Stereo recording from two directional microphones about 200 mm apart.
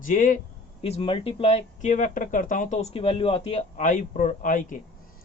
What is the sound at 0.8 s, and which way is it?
Speech, 30° left (ahead or behind).